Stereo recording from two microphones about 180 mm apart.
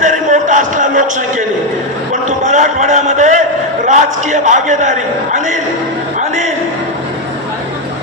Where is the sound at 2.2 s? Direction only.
40° right (ahead or behind).